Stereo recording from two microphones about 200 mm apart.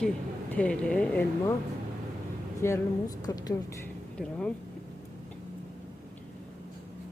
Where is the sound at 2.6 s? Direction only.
10° left (ahead or behind).